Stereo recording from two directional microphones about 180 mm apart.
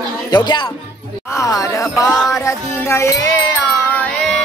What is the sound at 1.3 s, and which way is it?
Music, 20° left (ahead or behind).